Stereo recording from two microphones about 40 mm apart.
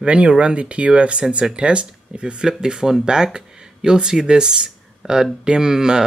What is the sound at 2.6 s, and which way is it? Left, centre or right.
Speech, centre.